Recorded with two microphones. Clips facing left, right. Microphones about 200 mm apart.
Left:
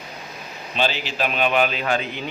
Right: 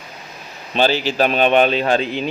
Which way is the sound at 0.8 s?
35° right (ahead or behind).